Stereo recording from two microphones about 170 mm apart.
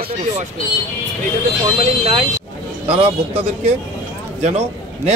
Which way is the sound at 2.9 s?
35° right (ahead or behind).